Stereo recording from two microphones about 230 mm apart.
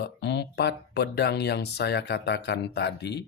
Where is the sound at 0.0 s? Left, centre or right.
Left.